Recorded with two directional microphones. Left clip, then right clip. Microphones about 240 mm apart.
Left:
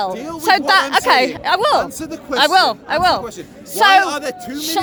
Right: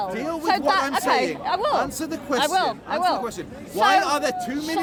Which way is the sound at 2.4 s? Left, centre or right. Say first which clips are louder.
Left 10 dB; left.